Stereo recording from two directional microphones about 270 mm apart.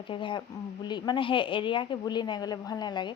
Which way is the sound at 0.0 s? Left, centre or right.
Centre.